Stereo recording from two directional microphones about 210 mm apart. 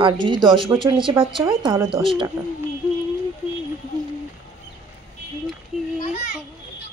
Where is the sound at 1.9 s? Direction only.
Centre (ahead or behind).